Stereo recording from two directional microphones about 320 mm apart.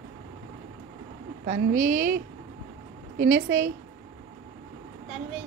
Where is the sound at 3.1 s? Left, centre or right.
Right.